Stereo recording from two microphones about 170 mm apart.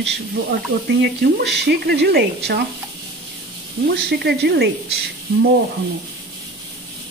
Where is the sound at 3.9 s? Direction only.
75° right (ahead or behind).